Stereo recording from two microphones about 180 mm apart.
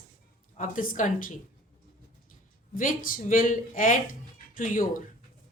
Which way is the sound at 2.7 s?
50° left (ahead or behind).